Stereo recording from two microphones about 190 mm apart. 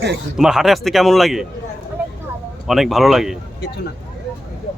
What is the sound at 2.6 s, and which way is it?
Speech, centre (ahead or behind).